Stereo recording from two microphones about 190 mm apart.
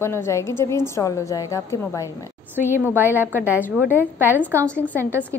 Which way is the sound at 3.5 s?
10° left (ahead or behind).